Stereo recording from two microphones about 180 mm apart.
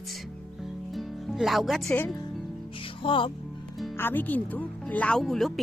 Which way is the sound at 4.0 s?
10° left (ahead or behind).